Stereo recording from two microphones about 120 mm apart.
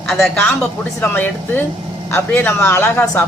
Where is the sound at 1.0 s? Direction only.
15° left (ahead or behind).